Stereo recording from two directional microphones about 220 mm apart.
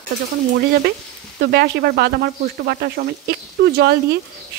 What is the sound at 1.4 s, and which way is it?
Speech, 50° right (ahead or behind).